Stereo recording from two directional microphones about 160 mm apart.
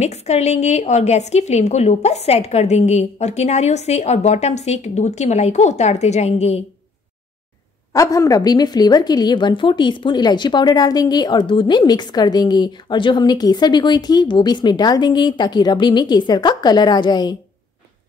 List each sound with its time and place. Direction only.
0.0 s a woman's voice: 45° left (ahead or behind)
7.9 s a woman's voice: 20° left (ahead or behind)